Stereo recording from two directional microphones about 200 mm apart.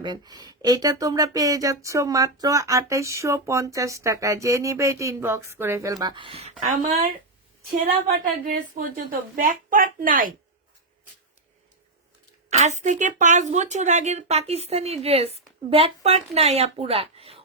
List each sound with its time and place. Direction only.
0.0 s a woman's voice: 20° right (ahead or behind); by 10.3 s 45° right (ahead or behind)
12.5 s a woman's voice: 35° right (ahead or behind)